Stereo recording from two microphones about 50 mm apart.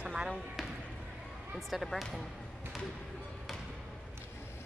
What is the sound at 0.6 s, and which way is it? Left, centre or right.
Music, centre.